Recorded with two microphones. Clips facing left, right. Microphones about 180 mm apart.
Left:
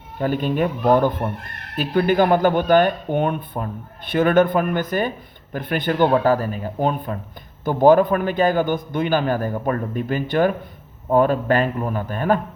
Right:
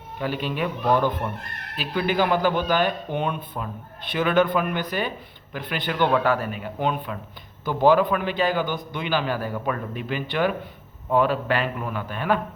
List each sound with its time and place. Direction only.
0.2 s a man's voice: 45° left (ahead or behind)